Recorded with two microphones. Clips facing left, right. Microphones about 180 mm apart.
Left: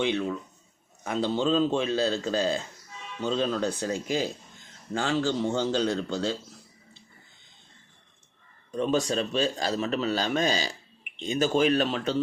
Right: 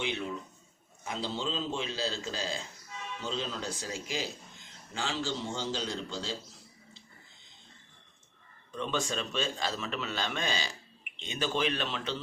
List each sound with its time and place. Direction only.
0.0 s speech: 55° left (ahead or behind)
8.7 s a man's voice: 40° left (ahead or behind)